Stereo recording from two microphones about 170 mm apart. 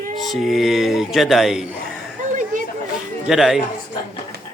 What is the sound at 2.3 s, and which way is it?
Chatter, 50° right (ahead or behind).